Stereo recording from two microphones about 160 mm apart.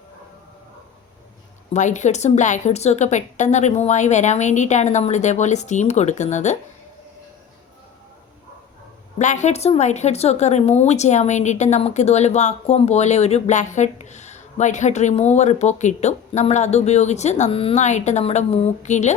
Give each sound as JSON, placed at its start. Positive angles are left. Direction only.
{"t": 1.7, "sound": "speech", "side_deg": 50}
{"t": 9.1, "sound": "speech", "side_deg": 50}